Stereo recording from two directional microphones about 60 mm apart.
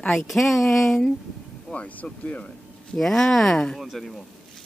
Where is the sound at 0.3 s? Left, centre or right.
Centre.